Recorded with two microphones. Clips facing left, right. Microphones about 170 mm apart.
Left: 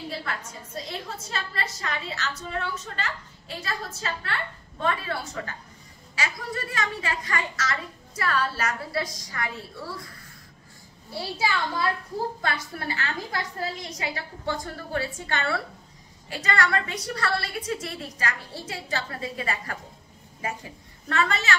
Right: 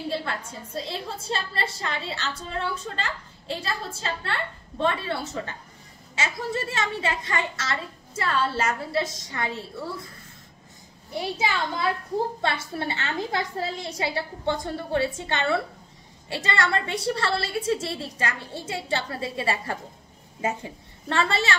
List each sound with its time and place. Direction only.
0.1 s a woman's voice: 30° right (ahead or behind)
11.1 s a woman's voice: 20° right (ahead or behind)